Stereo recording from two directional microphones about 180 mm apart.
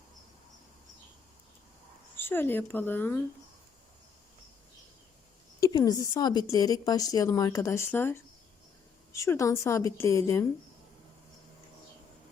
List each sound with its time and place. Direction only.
2.1 s speech: 10° left (ahead or behind)
5.5 s a woman's voice: 20° left (ahead or behind)